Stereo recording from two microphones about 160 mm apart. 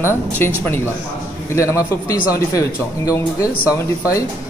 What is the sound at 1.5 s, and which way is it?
Speech, 20° left (ahead or behind).